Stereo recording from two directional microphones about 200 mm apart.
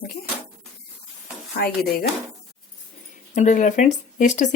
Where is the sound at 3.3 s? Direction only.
40° left (ahead or behind).